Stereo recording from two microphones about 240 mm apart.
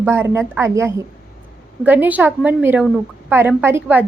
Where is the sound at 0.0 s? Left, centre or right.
Centre.